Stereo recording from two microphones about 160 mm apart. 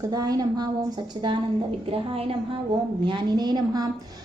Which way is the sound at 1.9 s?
35° right (ahead or behind).